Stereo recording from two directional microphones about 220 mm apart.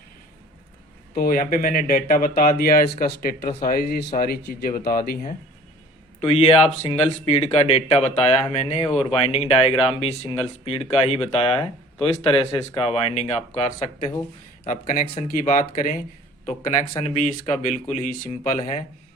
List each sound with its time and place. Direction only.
1.1 s speech: 40° left (ahead or behind)
6.1 s a man's voice: 25° left (ahead or behind)
14.1 s speech: 15° left (ahead or behind)
14.7 s speech: 35° left (ahead or behind)